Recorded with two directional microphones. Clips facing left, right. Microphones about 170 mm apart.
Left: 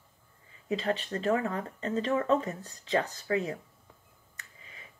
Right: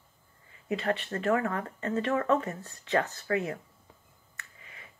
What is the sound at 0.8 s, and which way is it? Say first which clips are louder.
Speech: right 1 dB; 20° left (ahead or behind).